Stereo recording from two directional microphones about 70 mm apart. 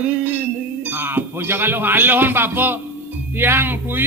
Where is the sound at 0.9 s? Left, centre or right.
Right.